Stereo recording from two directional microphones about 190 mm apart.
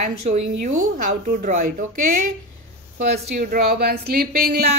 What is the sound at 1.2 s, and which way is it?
Speech, 50° right (ahead or behind).